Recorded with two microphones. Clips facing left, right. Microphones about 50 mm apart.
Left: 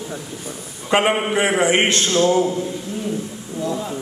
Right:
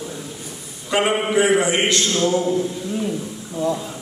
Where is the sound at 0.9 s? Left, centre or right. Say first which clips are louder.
Left 2 dB; left.